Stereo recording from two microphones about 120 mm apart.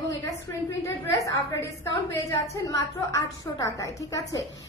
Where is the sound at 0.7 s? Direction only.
25° left (ahead or behind).